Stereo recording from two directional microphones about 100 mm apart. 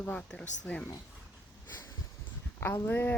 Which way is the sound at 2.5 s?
25° left (ahead or behind).